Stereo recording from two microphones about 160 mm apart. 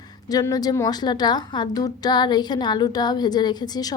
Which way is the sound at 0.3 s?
25° left (ahead or behind).